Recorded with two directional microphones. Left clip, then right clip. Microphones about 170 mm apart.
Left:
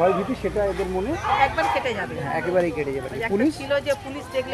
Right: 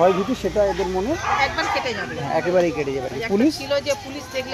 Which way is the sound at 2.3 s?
50° right (ahead or behind).